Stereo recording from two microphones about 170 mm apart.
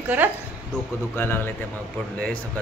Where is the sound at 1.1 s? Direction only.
15° left (ahead or behind).